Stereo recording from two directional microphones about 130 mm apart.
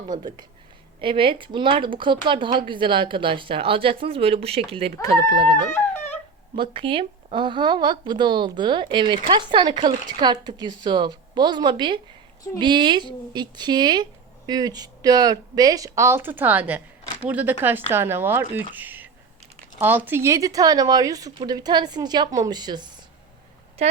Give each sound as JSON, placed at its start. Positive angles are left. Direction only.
{"t": 0.2, "sound": "speech", "side_deg": -35}
{"t": 5.7, "sound": "a sound", "side_deg": 15}
{"t": 6.6, "sound": "a woman's voice", "side_deg": -45}
{"t": 23.8, "sound": "speech", "side_deg": -50}